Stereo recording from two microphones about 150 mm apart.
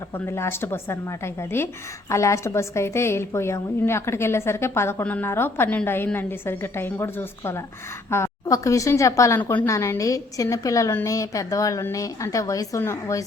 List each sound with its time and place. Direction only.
0.1 s a woman's voice: 15° left (ahead or behind)